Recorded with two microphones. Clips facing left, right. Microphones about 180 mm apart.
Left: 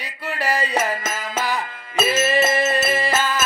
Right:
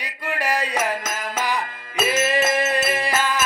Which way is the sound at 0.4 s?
10° right (ahead or behind).